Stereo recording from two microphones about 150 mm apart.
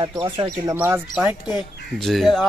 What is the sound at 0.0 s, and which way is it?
Speech, 30° right (ahead or behind).